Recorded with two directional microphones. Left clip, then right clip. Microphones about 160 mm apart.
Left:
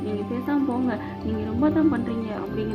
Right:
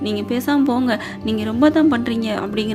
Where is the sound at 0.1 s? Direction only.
35° right (ahead or behind).